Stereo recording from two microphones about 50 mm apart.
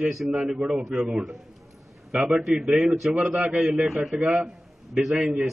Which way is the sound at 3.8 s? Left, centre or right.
Centre.